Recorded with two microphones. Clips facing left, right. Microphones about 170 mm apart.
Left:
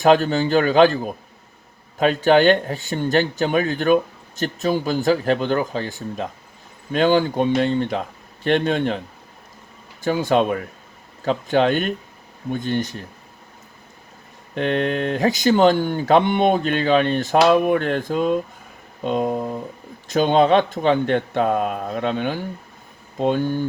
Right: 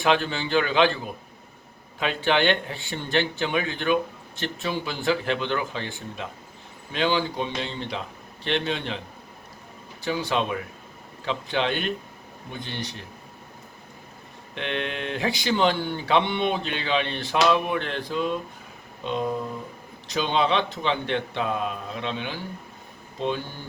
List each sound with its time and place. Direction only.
0.0 s speech: 40° left (ahead or behind)
10.0 s speech: 50° left (ahead or behind)
14.5 s speech: 45° left (ahead or behind)